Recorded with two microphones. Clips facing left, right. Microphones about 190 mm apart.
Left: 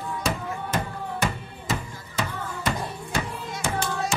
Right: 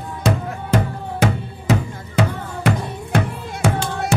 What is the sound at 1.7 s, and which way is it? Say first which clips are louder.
Music: right 10 dB; 65° right (ahead or behind).